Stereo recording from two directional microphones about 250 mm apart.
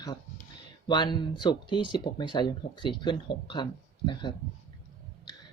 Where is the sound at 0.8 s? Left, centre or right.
Centre.